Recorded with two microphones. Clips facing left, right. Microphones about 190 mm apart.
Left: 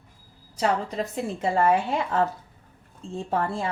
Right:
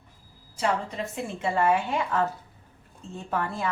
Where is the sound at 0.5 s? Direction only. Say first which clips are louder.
Left 3 dB; 35° left (ahead or behind).